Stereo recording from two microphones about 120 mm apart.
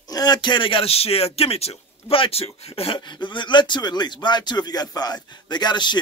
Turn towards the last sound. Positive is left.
turn(degrees=40)  # may be behind; listen again after turning